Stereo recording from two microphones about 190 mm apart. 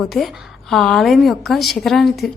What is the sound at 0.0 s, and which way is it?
A woman's voice, centre (ahead or behind).